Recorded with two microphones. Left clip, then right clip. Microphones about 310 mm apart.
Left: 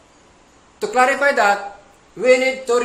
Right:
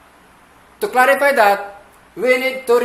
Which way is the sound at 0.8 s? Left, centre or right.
Centre.